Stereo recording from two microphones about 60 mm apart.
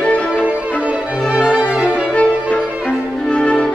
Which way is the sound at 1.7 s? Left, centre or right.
Centre.